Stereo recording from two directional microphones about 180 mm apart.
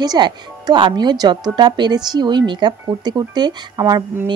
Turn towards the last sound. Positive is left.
turn(degrees=-20)  # may be behind; listen again after turning